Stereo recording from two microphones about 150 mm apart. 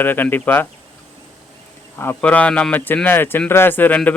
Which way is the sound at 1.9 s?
15° left (ahead or behind).